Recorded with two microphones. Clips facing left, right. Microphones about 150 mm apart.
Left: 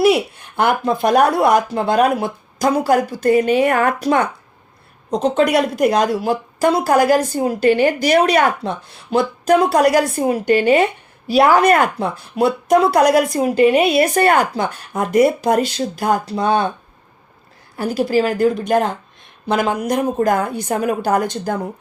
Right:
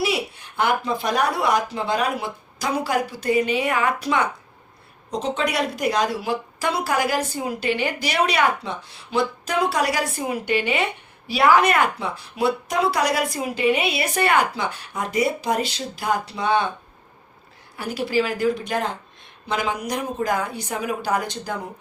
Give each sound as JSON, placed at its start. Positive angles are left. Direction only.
{"t": 0.0, "sound": "a woman's voice", "side_deg": 55}
{"t": 17.7, "sound": "a woman's voice", "side_deg": 40}